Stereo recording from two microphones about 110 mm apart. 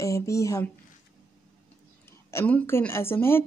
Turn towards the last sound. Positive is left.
turn(degrees=20)  # may be behind; listen again after turning